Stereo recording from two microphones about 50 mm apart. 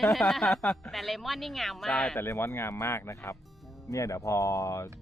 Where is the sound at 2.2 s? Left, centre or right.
Left.